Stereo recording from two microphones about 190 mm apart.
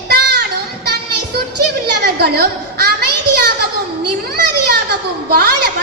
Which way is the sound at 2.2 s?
55° right (ahead or behind).